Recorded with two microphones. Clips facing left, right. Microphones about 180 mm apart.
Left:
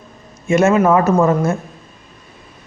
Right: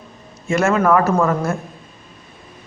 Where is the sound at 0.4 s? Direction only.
20° left (ahead or behind).